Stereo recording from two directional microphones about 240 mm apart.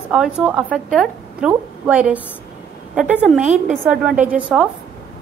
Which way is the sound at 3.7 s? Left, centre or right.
Centre.